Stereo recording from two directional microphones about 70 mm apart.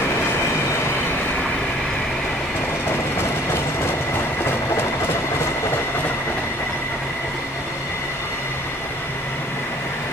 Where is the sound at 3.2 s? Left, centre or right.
Left.